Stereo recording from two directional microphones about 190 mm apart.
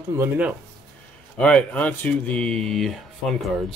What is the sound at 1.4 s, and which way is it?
Speech, 5° left (ahead or behind).